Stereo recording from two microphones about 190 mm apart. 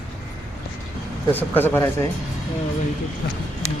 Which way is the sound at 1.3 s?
10° left (ahead or behind).